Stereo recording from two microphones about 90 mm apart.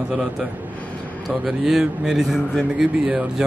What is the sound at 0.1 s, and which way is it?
A man's voice, 5° right (ahead or behind).